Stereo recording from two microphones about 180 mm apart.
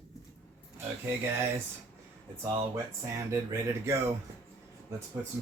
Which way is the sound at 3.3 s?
15° right (ahead or behind).